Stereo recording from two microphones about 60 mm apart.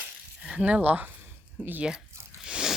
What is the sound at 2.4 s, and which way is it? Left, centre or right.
Crunch, centre.